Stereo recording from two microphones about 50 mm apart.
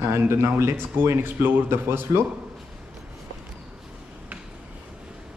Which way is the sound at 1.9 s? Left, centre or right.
Right.